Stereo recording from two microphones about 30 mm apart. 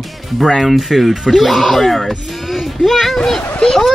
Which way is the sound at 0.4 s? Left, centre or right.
Centre.